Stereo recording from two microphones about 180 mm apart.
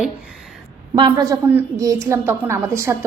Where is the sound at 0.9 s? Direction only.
20° right (ahead or behind).